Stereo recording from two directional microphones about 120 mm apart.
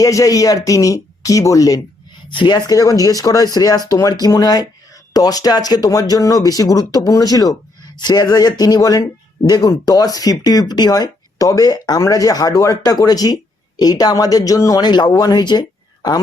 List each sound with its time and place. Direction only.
0.0 s speech: 30° left (ahead or behind)
2.3 s speech: 40° left (ahead or behind)